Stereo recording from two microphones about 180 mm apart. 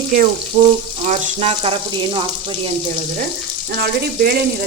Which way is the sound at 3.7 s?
60° right (ahead or behind).